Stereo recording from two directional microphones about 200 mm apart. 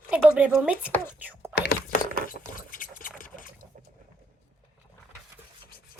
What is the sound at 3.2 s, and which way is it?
Boat, 45° left (ahead or behind).